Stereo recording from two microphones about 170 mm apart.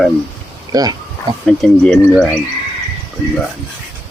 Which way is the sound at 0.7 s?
20° right (ahead or behind).